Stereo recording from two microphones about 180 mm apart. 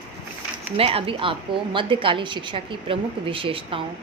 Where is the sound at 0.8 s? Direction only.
30° right (ahead or behind).